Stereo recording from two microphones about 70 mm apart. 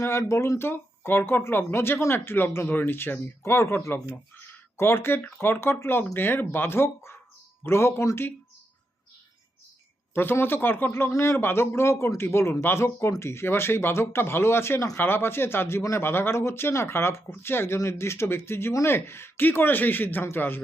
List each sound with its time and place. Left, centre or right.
0.0 s speech: left
0.7 s speech: left
10.2 s a man's voice: left